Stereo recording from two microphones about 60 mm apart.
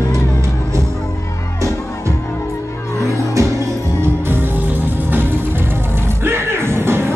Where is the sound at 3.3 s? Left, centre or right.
Right.